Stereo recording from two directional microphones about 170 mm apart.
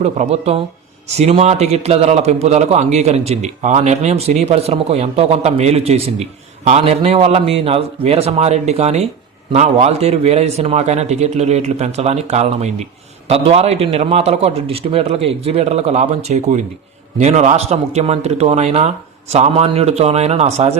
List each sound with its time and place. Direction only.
0.0 s a man's voice: 40° right (ahead or behind)